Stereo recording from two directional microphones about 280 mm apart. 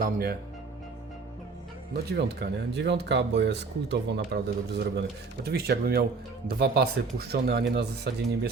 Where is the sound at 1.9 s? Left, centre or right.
Right.